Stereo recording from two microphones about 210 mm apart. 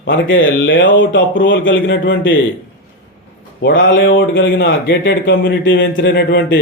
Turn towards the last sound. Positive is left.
turn(degrees=55)  # may be behind; listen again after turning